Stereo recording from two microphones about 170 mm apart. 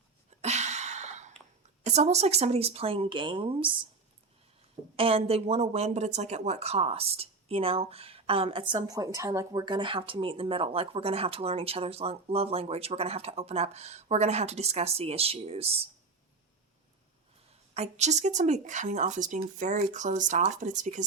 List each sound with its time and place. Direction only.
0.4 s a sound: 40° right (ahead or behind)
1.8 s a woman's voice: 40° right (ahead or behind)
4.9 s a woman's voice: 35° right (ahead or behind)
8.7 s a woman's voice: 20° right (ahead or behind); by 15.7 s 35° right (ahead or behind)
17.7 s speech: 40° right (ahead or behind)